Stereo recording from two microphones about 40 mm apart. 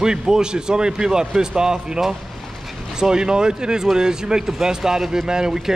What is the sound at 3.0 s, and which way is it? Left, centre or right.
A man's voice, centre.